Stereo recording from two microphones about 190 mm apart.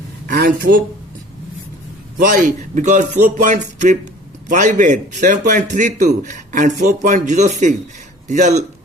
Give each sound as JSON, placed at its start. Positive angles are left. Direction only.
{"t": 0.3, "sound": "speech", "side_deg": -55}
{"t": 2.1, "sound": "a man's voice", "side_deg": -45}